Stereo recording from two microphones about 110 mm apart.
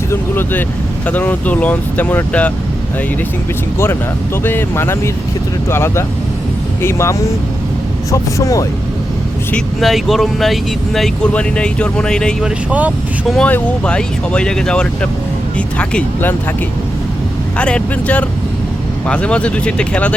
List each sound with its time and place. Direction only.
0.1 s speech: 20° left (ahead or behind)
4.4 s speech: 20° left (ahead or behind)
8.4 s speech: 30° left (ahead or behind)
9.8 s speech: centre (ahead or behind)
17.6 s speech: 10° left (ahead or behind)